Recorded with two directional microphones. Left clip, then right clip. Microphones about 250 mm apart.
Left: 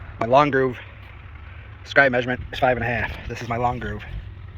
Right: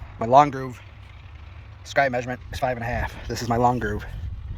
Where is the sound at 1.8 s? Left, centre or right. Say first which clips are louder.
Left 5 dB; right.